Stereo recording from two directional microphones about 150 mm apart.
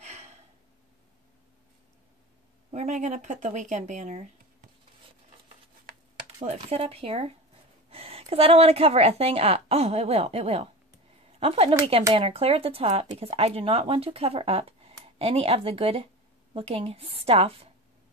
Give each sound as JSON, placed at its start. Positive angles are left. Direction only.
{"t": 0.0, "sound": "gasp", "side_deg": -45}
{"t": 2.7, "sound": "speech", "side_deg": -50}
{"t": 6.4, "sound": "speech", "side_deg": -45}